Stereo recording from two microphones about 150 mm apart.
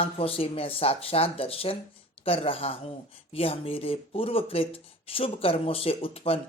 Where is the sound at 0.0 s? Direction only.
40° left (ahead or behind).